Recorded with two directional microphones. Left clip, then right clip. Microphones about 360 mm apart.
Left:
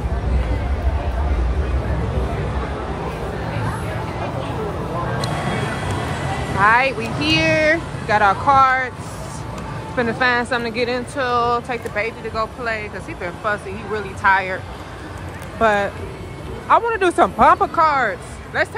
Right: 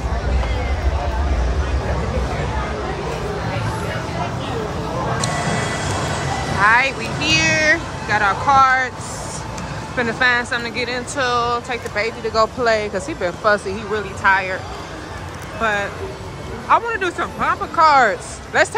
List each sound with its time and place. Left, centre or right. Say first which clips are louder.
6.6 s speech: even; centre
9.9 s speech: right 1 dB; centre
15.6 s speech: left 3 dB; centre